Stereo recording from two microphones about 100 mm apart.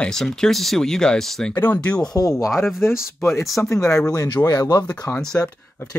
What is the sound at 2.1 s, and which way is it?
Speech, 40° left (ahead or behind).